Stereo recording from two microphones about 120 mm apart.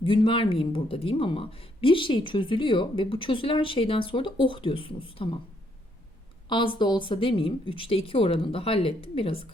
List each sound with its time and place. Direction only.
0.0 s speech: 45° left (ahead or behind)
6.5 s speech: 40° left (ahead or behind)